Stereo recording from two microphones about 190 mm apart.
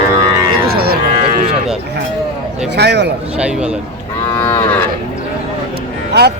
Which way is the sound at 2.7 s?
60° right (ahead or behind).